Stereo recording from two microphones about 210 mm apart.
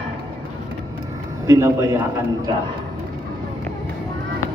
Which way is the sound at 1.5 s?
15° right (ahead or behind).